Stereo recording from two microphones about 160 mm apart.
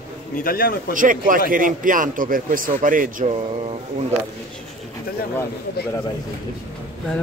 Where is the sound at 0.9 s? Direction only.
55° right (ahead or behind).